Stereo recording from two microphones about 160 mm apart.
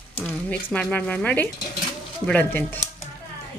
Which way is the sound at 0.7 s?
5° left (ahead or behind).